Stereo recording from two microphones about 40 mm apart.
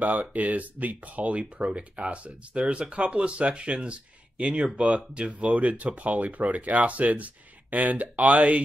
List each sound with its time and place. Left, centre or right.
0.0 s speech: right